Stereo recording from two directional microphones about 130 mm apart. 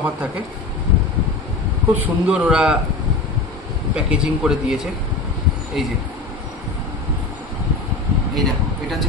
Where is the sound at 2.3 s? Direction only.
5° right (ahead or behind).